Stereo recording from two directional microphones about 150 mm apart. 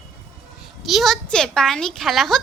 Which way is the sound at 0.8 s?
Centre (ahead or behind).